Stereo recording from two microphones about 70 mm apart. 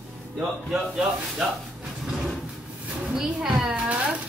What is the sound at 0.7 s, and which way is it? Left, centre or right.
Speech, centre.